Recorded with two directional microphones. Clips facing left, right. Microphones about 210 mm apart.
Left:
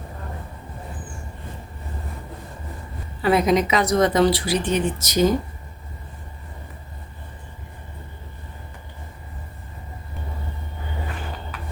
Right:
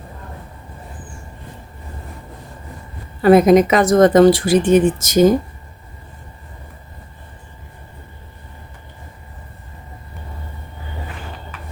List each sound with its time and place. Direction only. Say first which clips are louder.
3.2 s speech: right 8 dB; 50° right (ahead or behind)